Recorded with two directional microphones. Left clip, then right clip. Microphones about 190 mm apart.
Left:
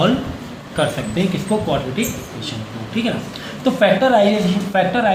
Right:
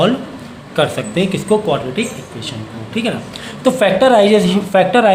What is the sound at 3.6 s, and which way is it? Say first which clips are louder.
A woman's voice: right 3 dB; 55° right (ahead or behind).